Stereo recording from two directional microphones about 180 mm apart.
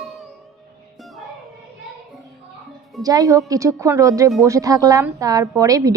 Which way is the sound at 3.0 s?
20° right (ahead or behind).